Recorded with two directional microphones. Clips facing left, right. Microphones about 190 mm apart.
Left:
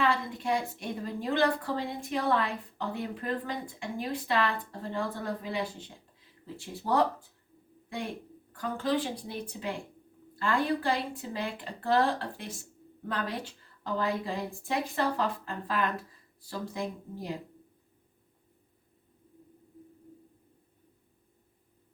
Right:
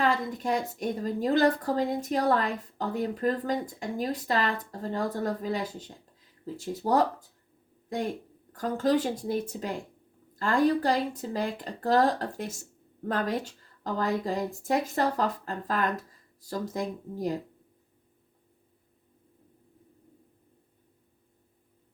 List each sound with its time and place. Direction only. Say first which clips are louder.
0.0 s a woman's voice: right 2 dB; 40° right (ahead or behind)